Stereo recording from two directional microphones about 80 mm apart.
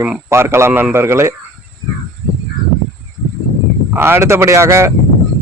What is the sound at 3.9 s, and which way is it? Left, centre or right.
Speech, right.